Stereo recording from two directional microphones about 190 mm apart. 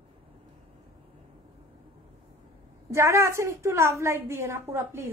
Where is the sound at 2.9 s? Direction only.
15° right (ahead or behind).